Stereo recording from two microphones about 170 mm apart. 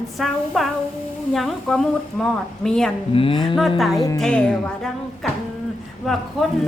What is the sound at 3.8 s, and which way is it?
A woman's voice, centre (ahead or behind).